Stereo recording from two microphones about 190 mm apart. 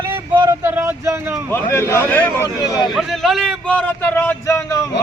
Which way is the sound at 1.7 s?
15° left (ahead or behind).